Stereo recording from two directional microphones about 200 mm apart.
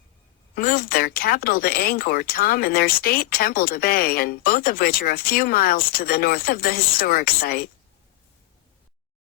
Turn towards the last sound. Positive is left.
turn(degrees=45)  # may be behind; listen again after turning